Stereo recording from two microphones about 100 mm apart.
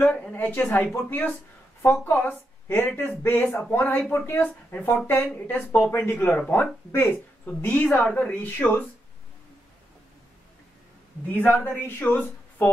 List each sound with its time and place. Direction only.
0.1 s a woman's voice: 15° left (ahead or behind)
11.3 s a woman's voice: 15° left (ahead or behind)